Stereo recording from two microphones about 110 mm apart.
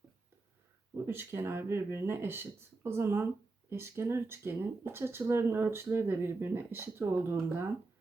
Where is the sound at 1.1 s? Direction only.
20° right (ahead or behind).